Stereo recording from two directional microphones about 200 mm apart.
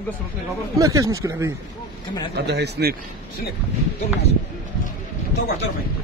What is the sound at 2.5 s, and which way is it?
Speech, 55° right (ahead or behind).